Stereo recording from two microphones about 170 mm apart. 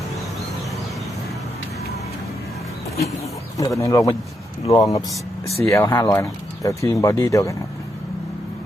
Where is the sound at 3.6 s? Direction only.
20° left (ahead or behind).